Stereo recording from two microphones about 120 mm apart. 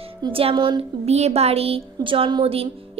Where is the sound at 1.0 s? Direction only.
60° right (ahead or behind).